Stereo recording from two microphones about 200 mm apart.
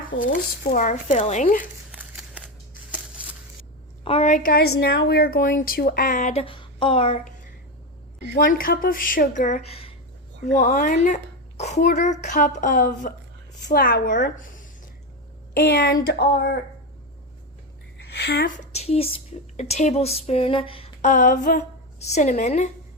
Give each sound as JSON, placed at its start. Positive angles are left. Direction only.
{"t": 0.2, "sound": "a woman's voice", "side_deg": 45}
{"t": 2.9, "sound": "a sound", "side_deg": -5}
{"t": 4.0, "sound": "a woman's voice", "side_deg": 30}
{"t": 4.3, "sound": "a woman's voice", "side_deg": 45}
{"t": 8.4, "sound": "a child's voice", "side_deg": 45}
{"t": 15.5, "sound": "speech", "side_deg": 50}
{"t": 18.1, "sound": "a woman's voice", "side_deg": 55}